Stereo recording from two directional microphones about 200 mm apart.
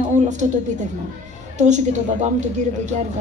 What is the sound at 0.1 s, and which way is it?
A woman's voice, 35° right (ahead or behind).